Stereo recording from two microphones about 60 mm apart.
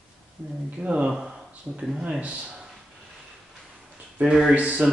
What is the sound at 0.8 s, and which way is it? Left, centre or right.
Speech, right.